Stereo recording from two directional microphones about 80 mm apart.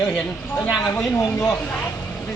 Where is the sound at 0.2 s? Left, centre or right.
Centre.